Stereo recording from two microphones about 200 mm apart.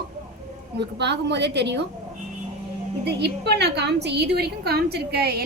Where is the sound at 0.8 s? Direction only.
60° right (ahead or behind).